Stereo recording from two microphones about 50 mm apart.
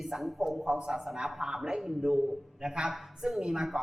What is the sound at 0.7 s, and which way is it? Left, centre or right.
A woman's voice, centre.